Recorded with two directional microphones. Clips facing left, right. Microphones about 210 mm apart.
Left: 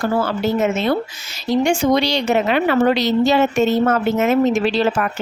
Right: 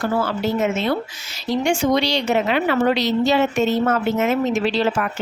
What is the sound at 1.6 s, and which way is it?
Speech, 45° left (ahead or behind).